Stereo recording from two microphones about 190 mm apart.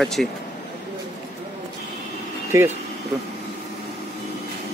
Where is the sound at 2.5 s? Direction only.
15° right (ahead or behind).